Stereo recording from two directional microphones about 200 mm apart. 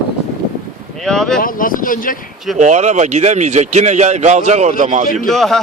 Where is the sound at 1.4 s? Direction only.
45° left (ahead or behind).